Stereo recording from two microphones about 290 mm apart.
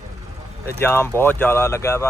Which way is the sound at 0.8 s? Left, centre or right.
Centre.